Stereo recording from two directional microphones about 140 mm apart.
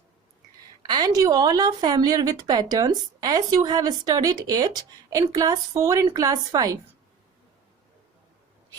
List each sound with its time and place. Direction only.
0.8 s a woman's voice: 30° right (ahead or behind)